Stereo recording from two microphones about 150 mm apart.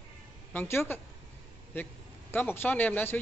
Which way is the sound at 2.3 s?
15° left (ahead or behind).